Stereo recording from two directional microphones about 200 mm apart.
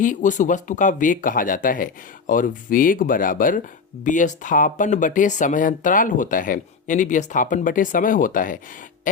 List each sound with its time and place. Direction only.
0.0 s speech: 40° left (ahead or behind)